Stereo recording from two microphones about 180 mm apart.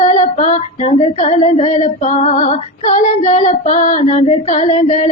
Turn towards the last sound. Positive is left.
turn(degrees=40)  # may be behind; listen again after turning